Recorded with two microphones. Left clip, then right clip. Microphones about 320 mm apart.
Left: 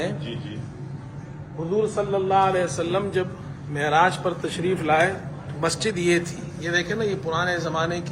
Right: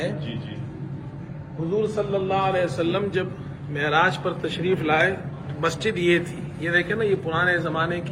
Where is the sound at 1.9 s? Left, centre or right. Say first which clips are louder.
Left 3 dB; left.